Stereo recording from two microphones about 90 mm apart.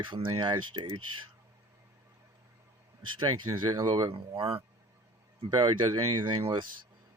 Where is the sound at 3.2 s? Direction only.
60° right (ahead or behind); by 4.6 s 75° right (ahead or behind).